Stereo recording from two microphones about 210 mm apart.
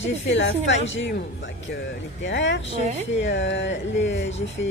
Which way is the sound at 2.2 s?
60° left (ahead or behind).